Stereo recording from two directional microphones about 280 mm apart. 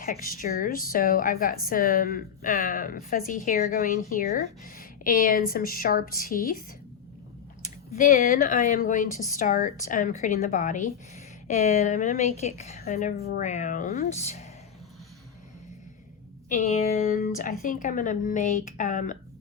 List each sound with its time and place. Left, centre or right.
0.0 s a woman's voice: left
7.9 s speech: left
16.5 s speech: left